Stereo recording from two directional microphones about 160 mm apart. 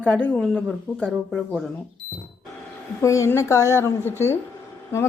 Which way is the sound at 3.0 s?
20° left (ahead or behind).